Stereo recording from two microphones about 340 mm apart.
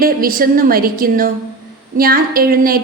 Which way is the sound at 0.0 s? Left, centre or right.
Right.